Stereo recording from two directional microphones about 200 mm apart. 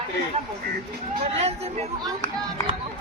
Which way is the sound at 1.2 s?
30° right (ahead or behind).